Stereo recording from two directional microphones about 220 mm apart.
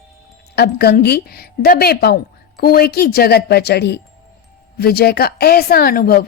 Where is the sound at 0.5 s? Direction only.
45° left (ahead or behind).